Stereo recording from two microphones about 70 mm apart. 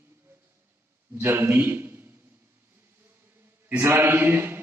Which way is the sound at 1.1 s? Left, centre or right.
Right.